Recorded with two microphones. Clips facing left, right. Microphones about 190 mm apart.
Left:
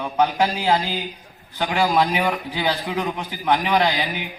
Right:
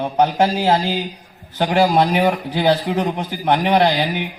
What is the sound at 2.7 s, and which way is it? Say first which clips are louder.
A man's voice: right 7 dB; 55° right (ahead or behind).